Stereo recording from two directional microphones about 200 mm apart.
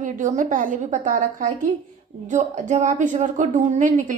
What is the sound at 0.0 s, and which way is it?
A woman's voice, 40° right (ahead or behind).